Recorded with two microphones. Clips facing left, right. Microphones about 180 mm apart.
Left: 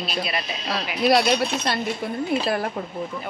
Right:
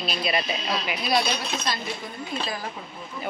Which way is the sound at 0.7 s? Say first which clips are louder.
Left 6 dB; 70° left (ahead or behind).